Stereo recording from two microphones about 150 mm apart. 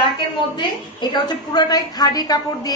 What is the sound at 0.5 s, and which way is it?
A woman's voice, 30° left (ahead or behind).